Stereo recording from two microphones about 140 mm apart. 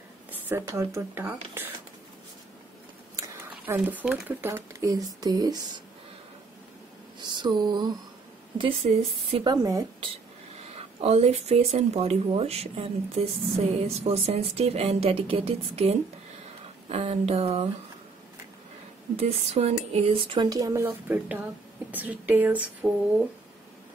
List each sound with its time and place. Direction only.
0.3 s speech: 20° right (ahead or behind)
3.2 s speech: 15° right (ahead or behind)
7.2 s a sound: 30° right (ahead or behind)
8.5 s speech: 40° right (ahead or behind)
9.5 s speech: 25° right (ahead or behind)
11.0 s speech: 45° right (ahead or behind)
19.1 s speech: 50° right (ahead or behind)
20.4 s speech: 25° right (ahead or behind)